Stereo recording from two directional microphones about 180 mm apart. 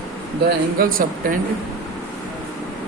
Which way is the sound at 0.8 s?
50° right (ahead or behind).